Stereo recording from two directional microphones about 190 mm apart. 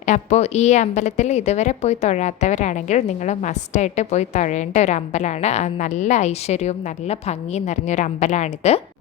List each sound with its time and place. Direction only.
0.0 s a woman's voice: 35° left (ahead or behind)